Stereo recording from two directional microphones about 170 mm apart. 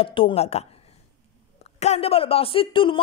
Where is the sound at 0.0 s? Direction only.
30° left (ahead or behind).